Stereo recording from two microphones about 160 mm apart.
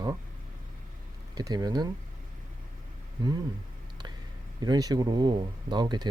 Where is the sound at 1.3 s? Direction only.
25° right (ahead or behind).